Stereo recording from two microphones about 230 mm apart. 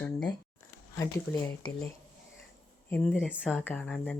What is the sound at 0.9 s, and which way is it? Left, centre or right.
Speech, centre.